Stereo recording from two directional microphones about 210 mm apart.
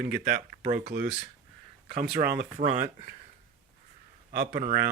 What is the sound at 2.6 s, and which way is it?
Speech, 35° right (ahead or behind).